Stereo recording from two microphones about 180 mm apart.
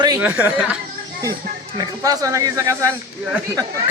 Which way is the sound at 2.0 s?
20° right (ahead or behind).